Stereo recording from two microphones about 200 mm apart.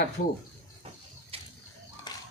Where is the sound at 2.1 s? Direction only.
20° left (ahead or behind).